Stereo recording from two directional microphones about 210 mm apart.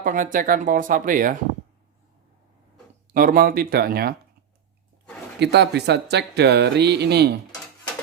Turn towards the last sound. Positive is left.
turn(degrees=-50)  # may be behind; listen again after turning